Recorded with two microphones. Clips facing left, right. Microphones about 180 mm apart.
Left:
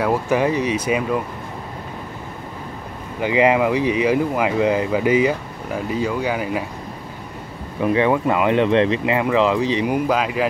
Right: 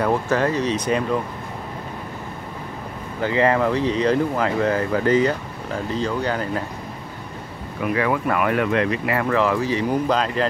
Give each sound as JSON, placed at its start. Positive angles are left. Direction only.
{"t": 0.0, "sound": "speech", "side_deg": 10}
{"t": 3.2, "sound": "speech", "side_deg": 15}
{"t": 7.8, "sound": "speech", "side_deg": 25}